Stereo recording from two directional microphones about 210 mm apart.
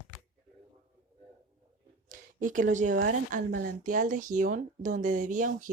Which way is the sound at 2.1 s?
40° right (ahead or behind).